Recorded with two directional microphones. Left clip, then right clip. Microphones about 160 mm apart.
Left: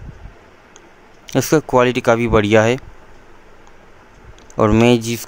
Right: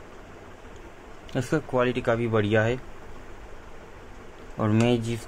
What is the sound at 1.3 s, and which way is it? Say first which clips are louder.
Speech: left 12 dB; 90° left.